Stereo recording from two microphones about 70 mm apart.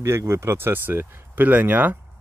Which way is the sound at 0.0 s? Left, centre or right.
Right.